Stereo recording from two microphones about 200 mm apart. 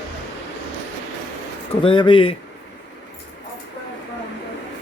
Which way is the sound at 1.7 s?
25° left (ahead or behind).